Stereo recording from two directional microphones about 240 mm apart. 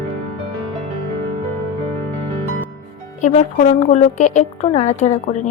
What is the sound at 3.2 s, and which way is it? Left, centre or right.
A woman's voice, left.